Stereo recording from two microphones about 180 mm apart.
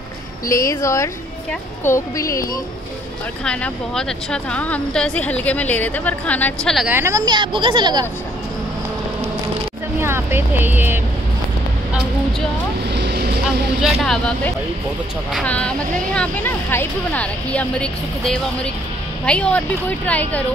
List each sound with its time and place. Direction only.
0.5 s a woman's voice: 15° left (ahead or behind)
3.4 s a woman's voice: 5° left (ahead or behind)
6.9 s a woman's voice: 15° right (ahead or behind)
9.9 s speech: 15° right (ahead or behind)
11.9 s speech: centre (ahead or behind)
12.9 s vehicle: 65° right (ahead or behind)
13.7 s a woman's voice: centre (ahead or behind)